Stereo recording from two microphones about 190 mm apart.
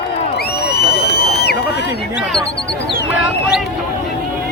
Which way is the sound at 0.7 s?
55° left (ahead or behind).